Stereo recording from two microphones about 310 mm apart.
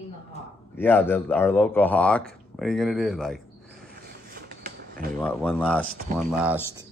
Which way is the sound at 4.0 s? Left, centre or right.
Right.